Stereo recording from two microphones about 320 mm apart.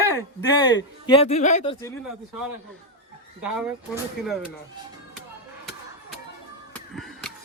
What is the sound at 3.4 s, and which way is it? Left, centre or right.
Speech, centre.